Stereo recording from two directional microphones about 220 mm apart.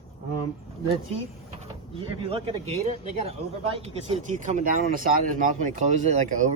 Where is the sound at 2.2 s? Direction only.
25° right (ahead or behind).